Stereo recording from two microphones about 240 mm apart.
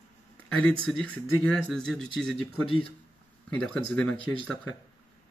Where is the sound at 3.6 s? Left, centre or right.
Centre.